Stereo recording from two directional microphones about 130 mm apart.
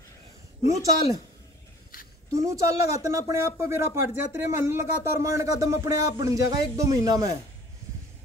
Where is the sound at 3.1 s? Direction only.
20° right (ahead or behind).